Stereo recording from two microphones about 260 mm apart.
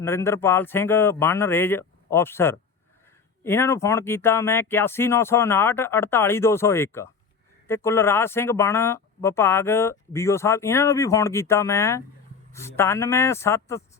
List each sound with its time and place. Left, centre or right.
0.0 s speech: centre